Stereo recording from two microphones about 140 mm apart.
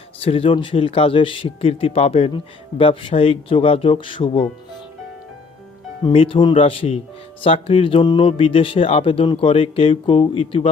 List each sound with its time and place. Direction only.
0.2 s speech: 45° left (ahead or behind)
6.0 s speech: 40° left (ahead or behind)